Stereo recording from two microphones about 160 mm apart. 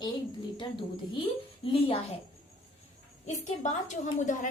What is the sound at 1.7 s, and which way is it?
Speech, 35° left (ahead or behind).